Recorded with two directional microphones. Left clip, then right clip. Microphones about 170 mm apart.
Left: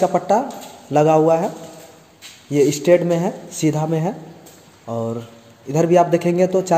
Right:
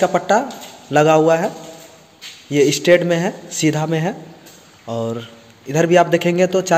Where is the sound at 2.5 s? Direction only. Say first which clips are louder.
Right 2 dB; 5° left (ahead or behind).